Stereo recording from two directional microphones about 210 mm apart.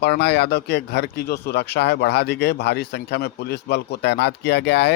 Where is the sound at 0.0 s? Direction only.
50° left (ahead or behind).